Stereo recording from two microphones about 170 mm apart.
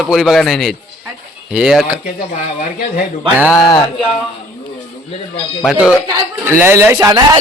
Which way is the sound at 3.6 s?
25° left (ahead or behind).